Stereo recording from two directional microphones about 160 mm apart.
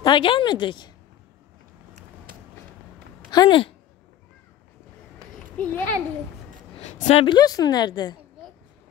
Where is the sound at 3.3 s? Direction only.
30° left (ahead or behind).